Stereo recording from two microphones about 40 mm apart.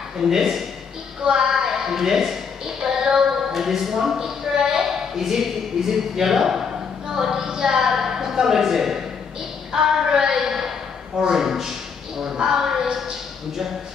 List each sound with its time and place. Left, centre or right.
0.3 s a woman's voice: centre
12.4 s speech: right